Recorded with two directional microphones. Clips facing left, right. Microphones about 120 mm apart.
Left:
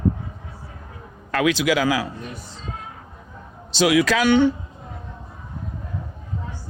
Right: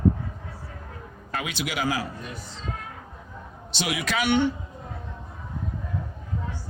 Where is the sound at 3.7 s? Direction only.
90° left.